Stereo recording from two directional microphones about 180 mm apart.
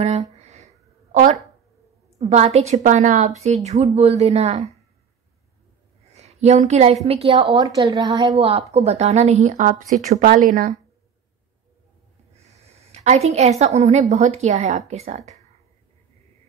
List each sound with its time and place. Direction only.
0.4 s a sound: 35° right (ahead or behind)
2.1 s a woman's voice: 40° right (ahead or behind)
6.1 s a woman's voice: 35° right (ahead or behind)
12.4 s a woman's voice: 35° right (ahead or behind)